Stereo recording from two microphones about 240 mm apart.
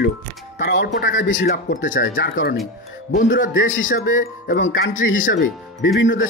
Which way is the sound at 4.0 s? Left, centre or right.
Left.